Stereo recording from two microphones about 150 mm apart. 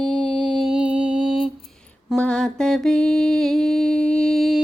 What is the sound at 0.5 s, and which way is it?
Music, 5° right (ahead or behind).